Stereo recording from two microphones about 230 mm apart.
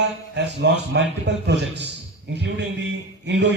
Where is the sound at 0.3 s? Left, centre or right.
Right.